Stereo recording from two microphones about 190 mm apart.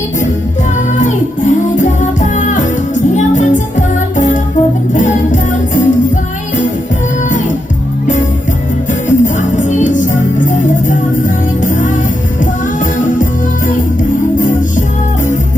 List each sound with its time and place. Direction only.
0.9 s music: 40° left (ahead or behind)
7.3 s music: 40° left (ahead or behind)
9.0 s music: 40° left (ahead or behind)
12.8 s music: 45° left (ahead or behind)
14.3 s music: 45° left (ahead or behind)